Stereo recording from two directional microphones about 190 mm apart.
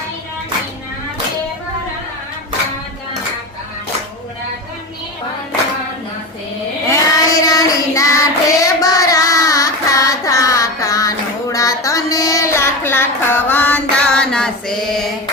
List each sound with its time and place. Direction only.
6.9 s child singing: 20° left (ahead or behind)